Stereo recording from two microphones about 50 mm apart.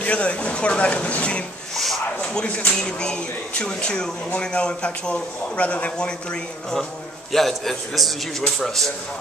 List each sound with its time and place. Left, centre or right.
0.0 s speech: left
7.3 s a man's voice: centre